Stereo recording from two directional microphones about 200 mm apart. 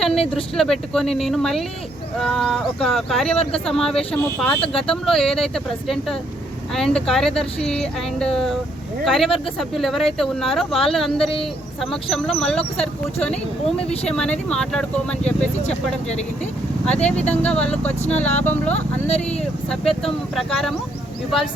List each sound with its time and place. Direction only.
0.5 s speech: centre (ahead or behind)
13.3 s speech: 30° left (ahead or behind)
14.1 s speech: 5° left (ahead or behind)
15.6 s speech: 35° left (ahead or behind)
16.8 s speech: 5° left (ahead or behind)
18.0 s speech: 35° left (ahead or behind)
18.4 s speech: 10° left (ahead or behind)
18.7 s speech: 30° left (ahead or behind)
19.6 s speech: centre (ahead or behind)